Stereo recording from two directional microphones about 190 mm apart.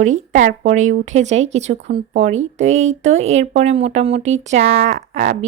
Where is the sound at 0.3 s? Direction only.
40° right (ahead or behind).